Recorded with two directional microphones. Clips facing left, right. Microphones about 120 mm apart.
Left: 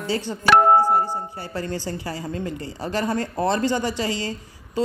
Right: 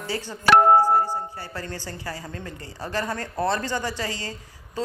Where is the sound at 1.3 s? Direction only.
20° left (ahead or behind).